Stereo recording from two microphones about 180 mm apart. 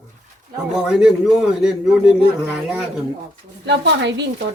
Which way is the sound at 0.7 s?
5° right (ahead or behind).